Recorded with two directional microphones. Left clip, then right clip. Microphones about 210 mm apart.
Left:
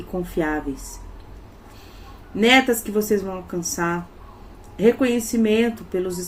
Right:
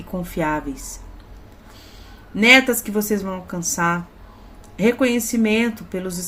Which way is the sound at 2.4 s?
45° right (ahead or behind).